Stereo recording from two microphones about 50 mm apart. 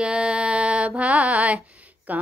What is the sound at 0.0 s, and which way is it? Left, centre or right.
Mantra, right.